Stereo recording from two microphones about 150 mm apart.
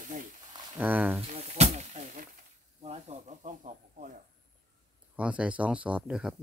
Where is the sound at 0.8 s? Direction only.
10° right (ahead or behind).